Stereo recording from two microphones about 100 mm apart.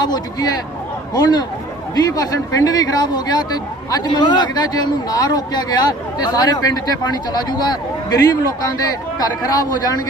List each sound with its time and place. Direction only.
0.0 s speech: 40° left (ahead or behind)